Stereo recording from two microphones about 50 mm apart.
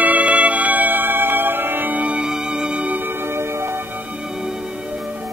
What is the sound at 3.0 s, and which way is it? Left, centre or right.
Music, right.